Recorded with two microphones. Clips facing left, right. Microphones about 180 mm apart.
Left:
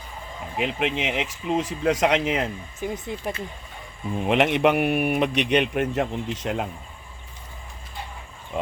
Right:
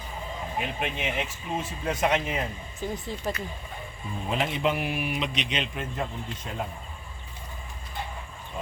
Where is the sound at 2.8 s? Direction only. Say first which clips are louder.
Left 2 dB; 20° left (ahead or behind).